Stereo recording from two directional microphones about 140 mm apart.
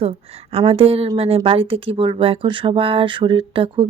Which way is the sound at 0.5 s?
40° right (ahead or behind).